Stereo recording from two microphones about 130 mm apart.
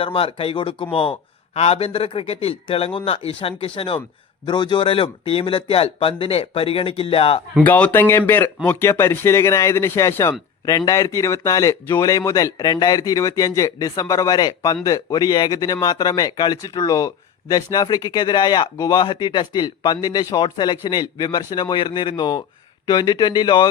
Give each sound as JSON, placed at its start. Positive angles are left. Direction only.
{"t": 0.0, "sound": "a man's voice", "side_deg": 45}
{"t": 7.6, "sound": "a man's voice", "side_deg": 10}